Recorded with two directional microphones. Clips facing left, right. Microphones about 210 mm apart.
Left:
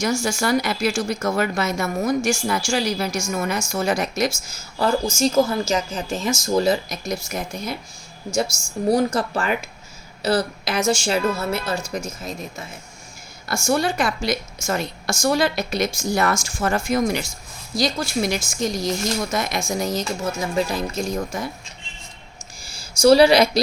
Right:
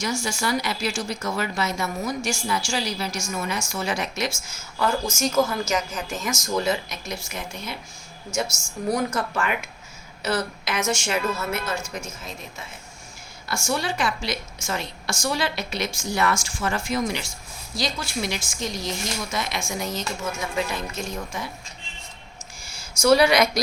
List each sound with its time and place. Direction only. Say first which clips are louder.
0.0 s a woman's voice: left 5 dB; 45° left (ahead or behind)
8.9 s speech: left 5 dB; 30° left (ahead or behind)
22.6 s a sound: left 6 dB; 35° left (ahead or behind)